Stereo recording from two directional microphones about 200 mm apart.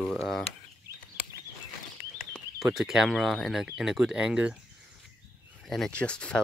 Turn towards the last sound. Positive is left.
turn(degrees=5)  # may be behind; listen again after turning